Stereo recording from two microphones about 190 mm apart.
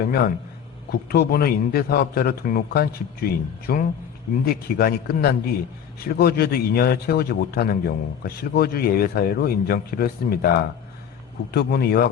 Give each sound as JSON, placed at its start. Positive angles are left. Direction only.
{"t": 0.9, "sound": "a man's voice", "side_deg": 55}